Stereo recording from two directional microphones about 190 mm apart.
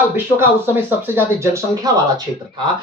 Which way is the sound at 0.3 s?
10° right (ahead or behind).